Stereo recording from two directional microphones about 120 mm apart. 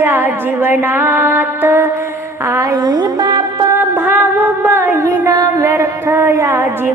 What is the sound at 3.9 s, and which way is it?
Music, 20° right (ahead or behind).